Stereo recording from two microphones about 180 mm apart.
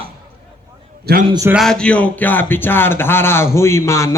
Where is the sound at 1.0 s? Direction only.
55° right (ahead or behind).